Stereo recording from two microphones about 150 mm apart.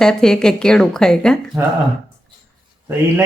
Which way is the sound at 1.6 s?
20° right (ahead or behind).